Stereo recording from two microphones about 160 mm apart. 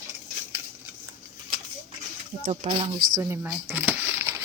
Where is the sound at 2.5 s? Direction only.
35° right (ahead or behind).